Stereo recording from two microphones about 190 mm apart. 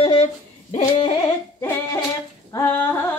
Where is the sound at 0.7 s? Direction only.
35° left (ahead or behind).